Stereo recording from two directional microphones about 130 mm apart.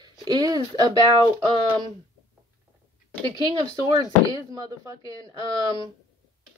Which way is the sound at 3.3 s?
35° right (ahead or behind).